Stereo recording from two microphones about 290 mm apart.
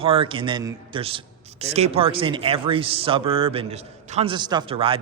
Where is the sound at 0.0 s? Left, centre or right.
Centre.